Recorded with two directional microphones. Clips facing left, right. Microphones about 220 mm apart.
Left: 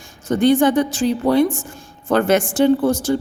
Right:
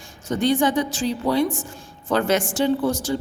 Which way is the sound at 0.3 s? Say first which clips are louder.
Left 6 dB; 55° left (ahead or behind).